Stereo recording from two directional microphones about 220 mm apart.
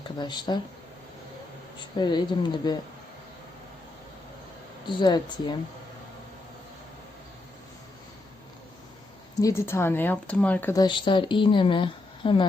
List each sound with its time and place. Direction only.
0.2 s speech: 20° left (ahead or behind)
2.0 s speech: 20° left (ahead or behind)
4.9 s speech: 20° left (ahead or behind)
9.4 s speech: 10° left (ahead or behind)